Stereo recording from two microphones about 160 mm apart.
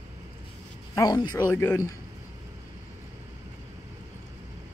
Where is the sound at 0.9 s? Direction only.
25° left (ahead or behind).